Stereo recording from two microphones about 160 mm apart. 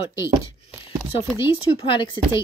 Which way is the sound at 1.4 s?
30° left (ahead or behind).